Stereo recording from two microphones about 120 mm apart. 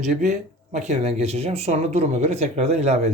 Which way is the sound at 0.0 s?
85° right.